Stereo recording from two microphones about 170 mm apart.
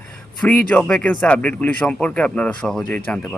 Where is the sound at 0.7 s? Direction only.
5° left (ahead or behind).